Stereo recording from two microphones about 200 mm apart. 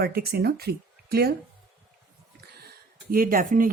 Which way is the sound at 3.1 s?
45° right (ahead or behind).